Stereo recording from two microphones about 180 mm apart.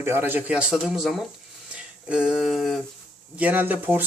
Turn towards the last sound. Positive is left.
turn(degrees=-10)  # may be behind; listen again after turning